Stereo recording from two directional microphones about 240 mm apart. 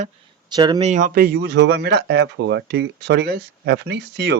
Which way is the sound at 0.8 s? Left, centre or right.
Right.